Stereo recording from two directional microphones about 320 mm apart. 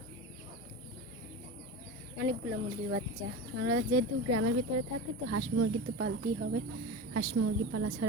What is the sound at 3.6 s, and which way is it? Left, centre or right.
Speech, right.